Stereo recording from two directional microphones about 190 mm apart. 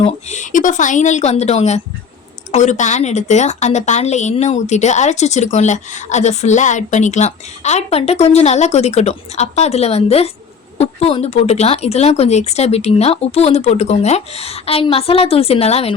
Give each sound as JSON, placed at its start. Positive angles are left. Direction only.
{"t": 0.0, "sound": "a woman's voice", "side_deg": 40}